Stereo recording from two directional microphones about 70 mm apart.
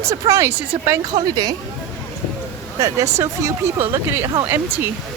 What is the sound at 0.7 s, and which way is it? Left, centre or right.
Speech, right.